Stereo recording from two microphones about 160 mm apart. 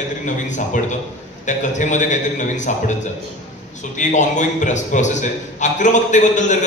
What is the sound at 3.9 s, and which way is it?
A man's voice, 50° left (ahead or behind).